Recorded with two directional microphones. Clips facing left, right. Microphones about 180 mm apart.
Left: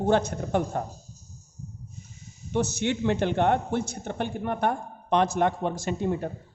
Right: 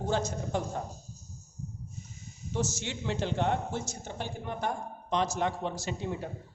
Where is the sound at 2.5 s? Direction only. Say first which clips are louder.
Left 8 dB; 60° left (ahead or behind).